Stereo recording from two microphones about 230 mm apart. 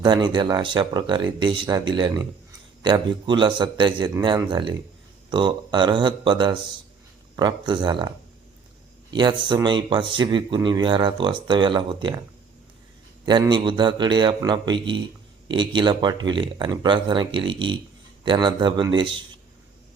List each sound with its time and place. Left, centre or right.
0.0 s speech: centre
9.1 s speech: centre
13.2 s speech: centre